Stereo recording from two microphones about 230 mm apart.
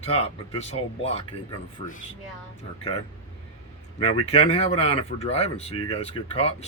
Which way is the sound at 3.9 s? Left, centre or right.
Left.